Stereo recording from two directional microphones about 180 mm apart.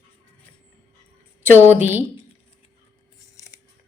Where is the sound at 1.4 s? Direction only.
10° right (ahead or behind).